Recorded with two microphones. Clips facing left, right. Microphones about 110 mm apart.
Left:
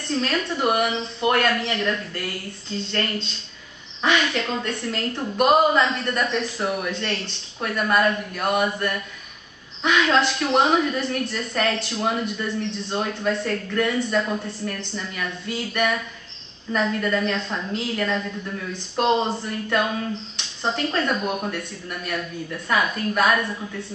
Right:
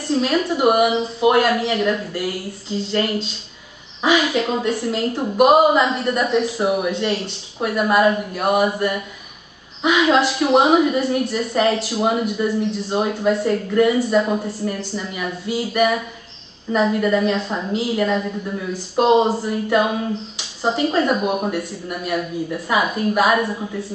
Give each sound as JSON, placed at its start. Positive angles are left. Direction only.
{"t": 0.0, "sound": "a woman's voice", "side_deg": -5}
{"t": 22.1, "sound": "a woman's voice", "side_deg": -25}
{"t": 22.7, "sound": "a woman's voice", "side_deg": -15}
{"t": 23.4, "sound": "a woman's voice", "side_deg": -25}